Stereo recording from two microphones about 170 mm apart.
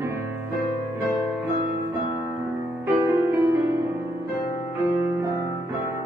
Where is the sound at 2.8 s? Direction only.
10° right (ahead or behind).